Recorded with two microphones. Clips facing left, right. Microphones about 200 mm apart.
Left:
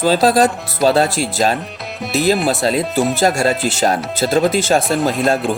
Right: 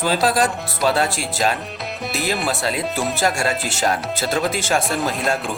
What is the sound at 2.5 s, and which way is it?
Speech, 35° left (ahead or behind).